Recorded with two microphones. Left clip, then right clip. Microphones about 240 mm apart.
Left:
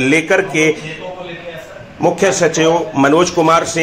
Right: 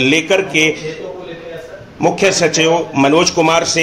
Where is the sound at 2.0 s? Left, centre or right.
Centre.